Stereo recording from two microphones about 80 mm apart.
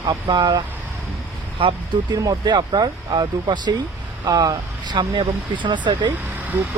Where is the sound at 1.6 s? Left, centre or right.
Right.